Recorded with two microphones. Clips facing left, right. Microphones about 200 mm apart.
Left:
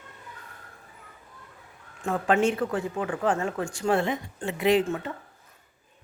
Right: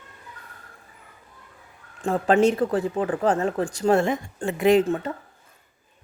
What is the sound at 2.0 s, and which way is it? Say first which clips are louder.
Speech: right 4 dB; 30° right (ahead or behind).